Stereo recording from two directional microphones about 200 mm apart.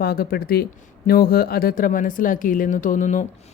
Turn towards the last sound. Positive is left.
turn(degrees=40)  # may be behind; listen again after turning